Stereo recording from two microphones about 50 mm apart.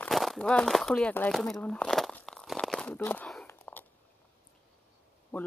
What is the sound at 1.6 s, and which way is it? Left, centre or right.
Speech, centre.